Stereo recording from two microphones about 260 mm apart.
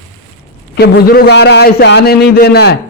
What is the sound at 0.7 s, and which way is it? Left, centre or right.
A man's voice, left.